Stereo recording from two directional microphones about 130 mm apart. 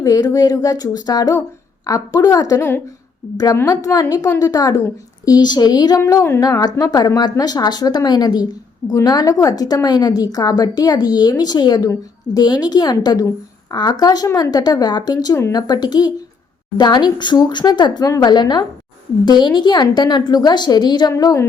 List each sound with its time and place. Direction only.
0.0 s a woman's voice: 30° left (ahead or behind)
2.6 s speech: 15° left (ahead or behind)
3.3 s a woman's voice: 30° left (ahead or behind)
15.4 s a woman's voice: 20° left (ahead or behind)
15.6 s a woman's voice: 30° left (ahead or behind)